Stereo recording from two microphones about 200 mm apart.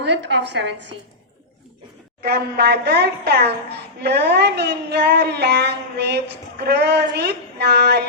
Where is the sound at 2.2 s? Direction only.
50° right (ahead or behind).